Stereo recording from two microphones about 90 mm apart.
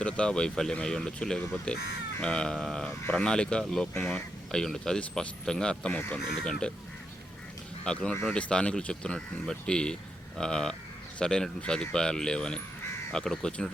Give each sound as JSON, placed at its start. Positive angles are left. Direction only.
{"t": 0.0, "sound": "speech", "side_deg": 10}
{"t": 3.9, "sound": "speech", "side_deg": 20}
{"t": 4.5, "sound": "speech", "side_deg": 5}
{"t": 5.9, "sound": "speech", "side_deg": 20}
{"t": 6.1, "sound": "speech", "side_deg": 5}
{"t": 7.9, "sound": "speech", "side_deg": 10}